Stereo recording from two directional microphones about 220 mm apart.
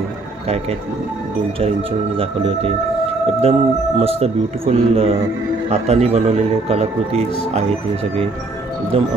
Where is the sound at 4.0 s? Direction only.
25° right (ahead or behind).